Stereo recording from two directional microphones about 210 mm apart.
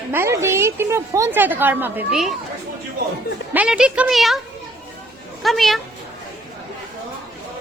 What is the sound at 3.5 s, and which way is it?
Speech, 5° right (ahead or behind).